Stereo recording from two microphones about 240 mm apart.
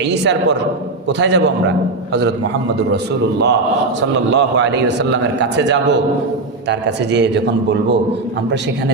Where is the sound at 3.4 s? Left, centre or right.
Right.